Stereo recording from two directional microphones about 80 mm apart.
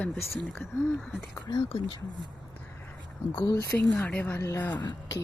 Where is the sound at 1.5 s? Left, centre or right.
Left.